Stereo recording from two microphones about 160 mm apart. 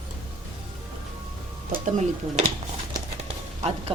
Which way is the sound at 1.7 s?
50° right (ahead or behind).